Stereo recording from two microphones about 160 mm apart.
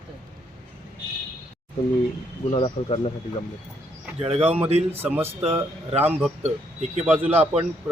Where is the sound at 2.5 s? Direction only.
35° left (ahead or behind).